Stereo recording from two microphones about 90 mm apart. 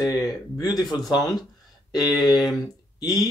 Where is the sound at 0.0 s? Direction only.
40° left (ahead or behind).